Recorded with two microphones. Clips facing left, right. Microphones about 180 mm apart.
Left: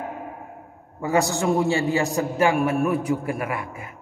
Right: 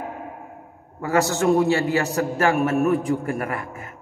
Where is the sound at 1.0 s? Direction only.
65° right (ahead or behind).